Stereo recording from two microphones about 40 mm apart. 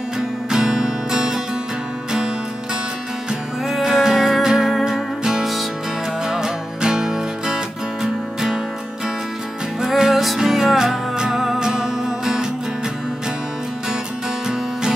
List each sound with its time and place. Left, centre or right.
0.5 s music: centre
3.6 s music: centre
9.8 s music: centre
14.5 s music: centre